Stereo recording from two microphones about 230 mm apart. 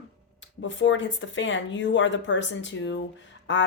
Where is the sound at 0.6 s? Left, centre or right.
Left.